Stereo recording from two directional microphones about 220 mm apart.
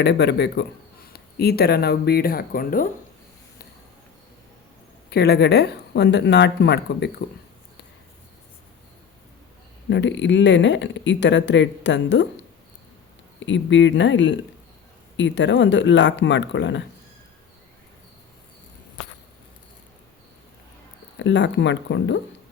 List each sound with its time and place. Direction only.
0.0 s a woman's voice: 50° left (ahead or behind)
5.1 s a woman's voice: 45° left (ahead or behind)
9.9 s speech: 55° left (ahead or behind)
13.4 s a woman's voice: 55° left (ahead or behind)
21.2 s speech: 55° left (ahead or behind)